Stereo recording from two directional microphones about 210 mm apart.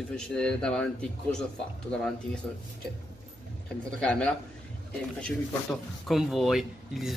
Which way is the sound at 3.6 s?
5° left (ahead or behind).